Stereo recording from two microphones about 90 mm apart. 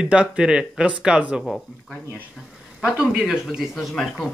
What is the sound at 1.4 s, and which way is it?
Speech, centre (ahead or behind).